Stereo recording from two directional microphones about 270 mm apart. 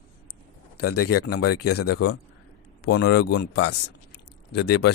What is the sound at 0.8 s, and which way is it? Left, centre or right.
Speech, left.